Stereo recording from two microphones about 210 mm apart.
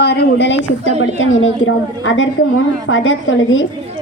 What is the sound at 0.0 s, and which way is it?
Speech, 55° left (ahead or behind).